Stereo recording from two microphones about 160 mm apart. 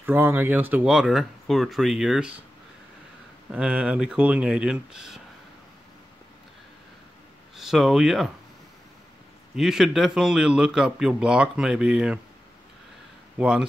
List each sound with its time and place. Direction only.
0.0 s a man's voice: 15° right (ahead or behind)
3.5 s speech: 5° right (ahead or behind)
7.5 s speech: centre (ahead or behind)
9.6 s a man's voice: centre (ahead or behind)
13.4 s a man's voice: 5° right (ahead or behind)